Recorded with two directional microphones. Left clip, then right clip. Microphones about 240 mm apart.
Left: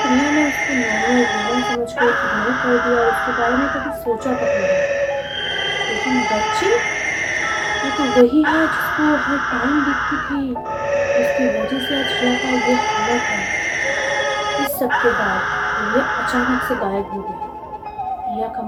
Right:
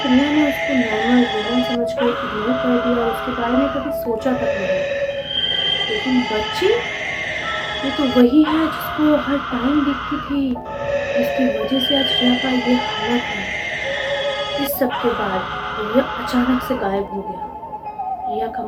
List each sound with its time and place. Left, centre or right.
0.0 s a sound: centre
0.8 s speech: left
1.1 s speech: centre
4.4 s speech: centre
6.1 s speech: centre
8.0 s speech: centre
12.3 s speech: centre
16.0 s speech: left